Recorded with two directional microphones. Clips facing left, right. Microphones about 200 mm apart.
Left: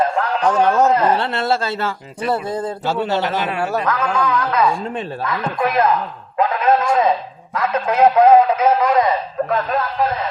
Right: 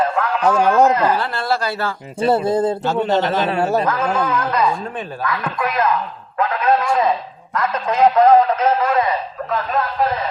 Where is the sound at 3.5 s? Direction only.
25° right (ahead or behind).